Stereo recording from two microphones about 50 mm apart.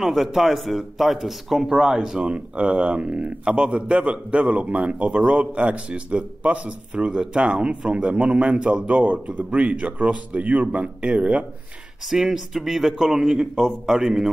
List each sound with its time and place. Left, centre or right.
0.0 s a man's voice: centre
8.8 s a man's voice: right
12.1 s a man's voice: centre